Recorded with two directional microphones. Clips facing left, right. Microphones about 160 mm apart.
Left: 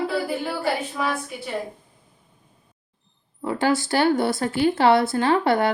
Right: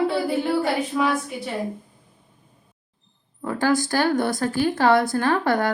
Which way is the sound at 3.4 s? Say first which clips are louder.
Even; 20° left (ahead or behind).